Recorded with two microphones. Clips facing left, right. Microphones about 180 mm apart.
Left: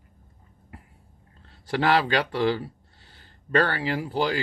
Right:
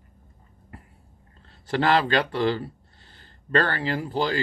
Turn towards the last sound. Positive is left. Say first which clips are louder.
# even
turn(degrees=10)  # may be behind; listen again after turning